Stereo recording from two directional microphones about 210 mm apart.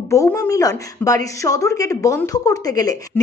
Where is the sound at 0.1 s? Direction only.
15° left (ahead or behind).